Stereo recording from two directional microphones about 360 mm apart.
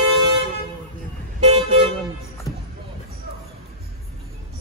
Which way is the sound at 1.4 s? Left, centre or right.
Centre.